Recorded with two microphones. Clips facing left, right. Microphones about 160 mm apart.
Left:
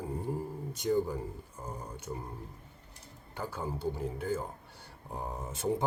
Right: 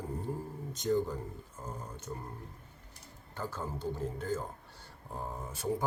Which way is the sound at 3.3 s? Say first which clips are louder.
Left 2 dB; 15° left (ahead or behind).